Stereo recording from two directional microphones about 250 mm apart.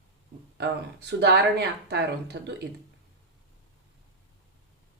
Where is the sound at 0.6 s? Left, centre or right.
Right.